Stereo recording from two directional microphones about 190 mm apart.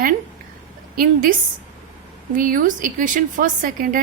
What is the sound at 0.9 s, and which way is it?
A woman's voice, 45° right (ahead or behind).